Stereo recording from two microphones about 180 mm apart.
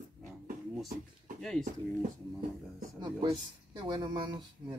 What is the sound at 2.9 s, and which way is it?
Speech, 25° right (ahead or behind).